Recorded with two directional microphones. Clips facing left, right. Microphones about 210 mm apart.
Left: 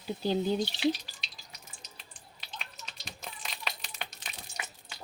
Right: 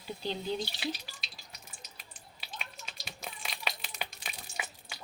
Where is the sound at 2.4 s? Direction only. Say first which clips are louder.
Right 1 dB; 5° right (ahead or behind).